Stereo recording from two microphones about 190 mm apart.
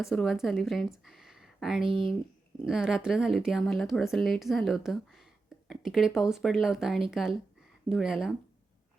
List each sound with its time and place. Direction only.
0.1 s speech: centre (ahead or behind)
1.9 s speech: 25° right (ahead or behind)
2.6 s speech: 5° right (ahead or behind)